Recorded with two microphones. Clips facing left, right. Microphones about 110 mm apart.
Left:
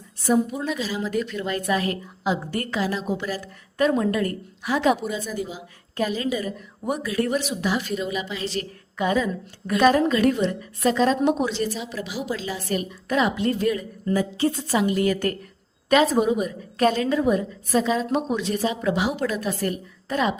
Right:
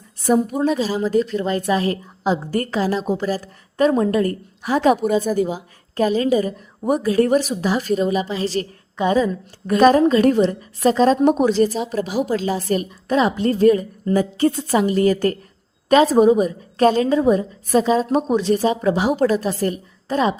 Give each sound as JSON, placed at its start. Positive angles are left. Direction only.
{"t": 0.2, "sound": "a woman's voice", "side_deg": -50}
{"t": 14.8, "sound": "a woman's voice", "side_deg": -35}